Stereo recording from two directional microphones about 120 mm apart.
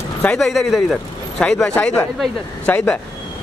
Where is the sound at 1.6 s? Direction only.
15° left (ahead or behind).